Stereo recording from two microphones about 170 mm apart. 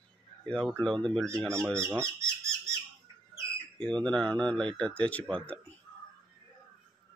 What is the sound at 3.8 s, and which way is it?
Speech, 5° left (ahead or behind).